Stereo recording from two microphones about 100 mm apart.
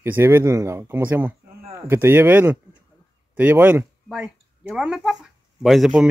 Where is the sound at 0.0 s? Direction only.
25° right (ahead or behind).